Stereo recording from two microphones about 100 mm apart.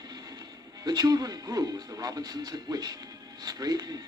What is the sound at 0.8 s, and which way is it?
Speech, 40° right (ahead or behind).